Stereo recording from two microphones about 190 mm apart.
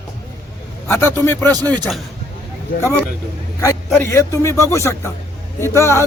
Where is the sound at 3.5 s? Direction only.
15° left (ahead or behind).